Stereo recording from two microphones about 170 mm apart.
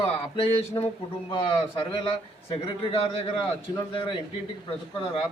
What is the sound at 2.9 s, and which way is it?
A man's voice, 35° left (ahead or behind).